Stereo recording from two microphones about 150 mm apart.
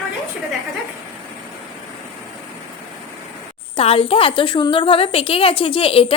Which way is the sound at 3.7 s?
40° left (ahead or behind).